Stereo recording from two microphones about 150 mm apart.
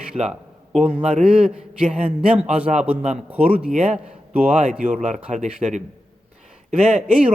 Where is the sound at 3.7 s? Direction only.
45° right (ahead or behind).